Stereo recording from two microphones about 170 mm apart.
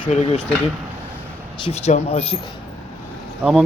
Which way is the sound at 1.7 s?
40° left (ahead or behind).